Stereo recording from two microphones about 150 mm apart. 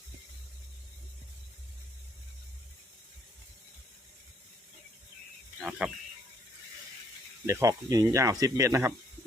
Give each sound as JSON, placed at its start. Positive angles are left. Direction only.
{"t": 5.5, "sound": "speech", "side_deg": -5}
{"t": 7.4, "sound": "speech", "side_deg": -20}